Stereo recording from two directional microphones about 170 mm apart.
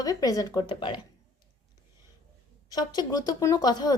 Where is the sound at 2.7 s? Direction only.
25° left (ahead or behind).